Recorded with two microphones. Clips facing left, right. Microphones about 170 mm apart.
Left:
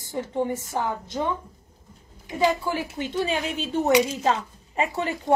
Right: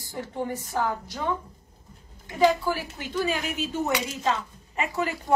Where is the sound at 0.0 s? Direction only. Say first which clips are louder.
Left 5 dB; 25° left (ahead or behind).